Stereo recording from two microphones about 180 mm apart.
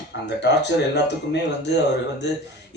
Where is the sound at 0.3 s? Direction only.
75° left (ahead or behind).